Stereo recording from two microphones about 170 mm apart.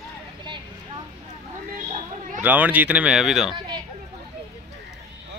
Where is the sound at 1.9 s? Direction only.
50° right (ahead or behind).